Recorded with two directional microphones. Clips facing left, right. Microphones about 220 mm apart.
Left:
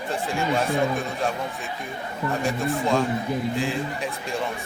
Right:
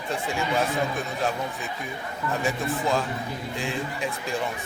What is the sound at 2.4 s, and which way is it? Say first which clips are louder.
A man's voice: left 2 dB; centre (ahead or behind).